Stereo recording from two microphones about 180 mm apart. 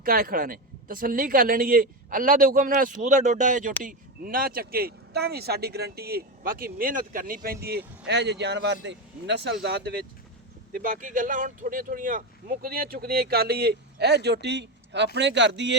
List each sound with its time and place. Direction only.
0.0 s speech: 55° right (ahead or behind); by 9.5 s 75° right (ahead or behind)
9.6 s speech: 65° right (ahead or behind)
10.7 s speech: 50° right (ahead or behind); by 15.8 s 75° right (ahead or behind)